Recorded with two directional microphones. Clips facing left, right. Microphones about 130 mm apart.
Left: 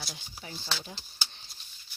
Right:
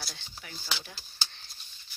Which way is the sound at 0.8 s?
20° left (ahead or behind).